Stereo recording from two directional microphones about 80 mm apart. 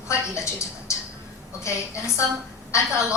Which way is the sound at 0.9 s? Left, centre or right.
Left.